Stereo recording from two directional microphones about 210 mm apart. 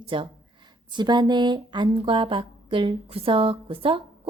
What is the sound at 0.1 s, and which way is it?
Speech, 25° right (ahead or behind).